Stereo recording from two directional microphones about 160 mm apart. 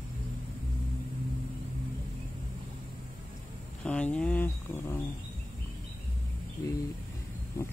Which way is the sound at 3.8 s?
5° left (ahead or behind).